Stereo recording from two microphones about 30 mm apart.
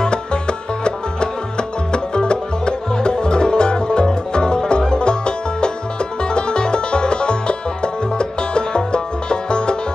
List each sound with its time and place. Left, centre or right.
0.0 s music: left